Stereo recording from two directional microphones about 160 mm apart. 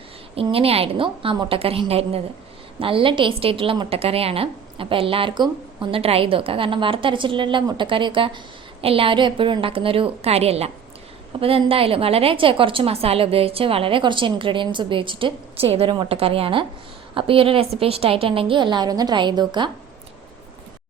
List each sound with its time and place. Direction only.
0.3 s a woman's voice: 35° right (ahead or behind)